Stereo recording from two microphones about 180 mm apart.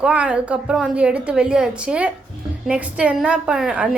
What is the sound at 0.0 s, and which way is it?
A woman's voice, 5° right (ahead or behind).